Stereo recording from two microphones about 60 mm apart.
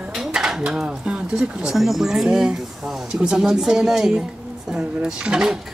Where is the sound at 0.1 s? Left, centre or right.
Centre.